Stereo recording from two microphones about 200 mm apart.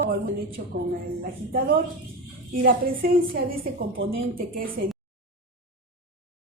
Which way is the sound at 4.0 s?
80° right.